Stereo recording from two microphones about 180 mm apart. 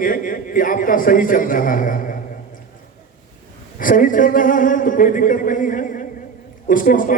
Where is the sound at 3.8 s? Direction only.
50° left (ahead or behind).